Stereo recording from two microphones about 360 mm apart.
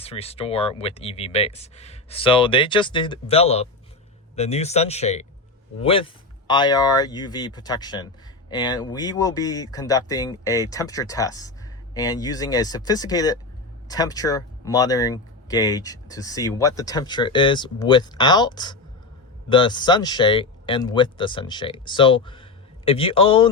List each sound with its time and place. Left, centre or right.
0.0 s speech: centre